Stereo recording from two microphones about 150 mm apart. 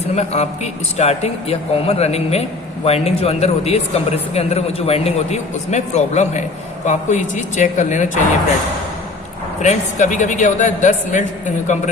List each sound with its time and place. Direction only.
0.2 s speech: 50° left (ahead or behind)
9.6 s a man's voice: 55° left (ahead or behind)